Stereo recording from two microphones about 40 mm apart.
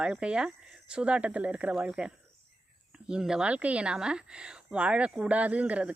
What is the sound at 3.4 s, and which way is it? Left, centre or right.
Speech, right.